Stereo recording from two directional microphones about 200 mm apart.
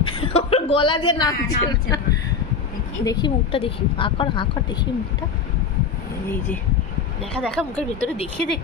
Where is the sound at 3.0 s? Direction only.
20° left (ahead or behind).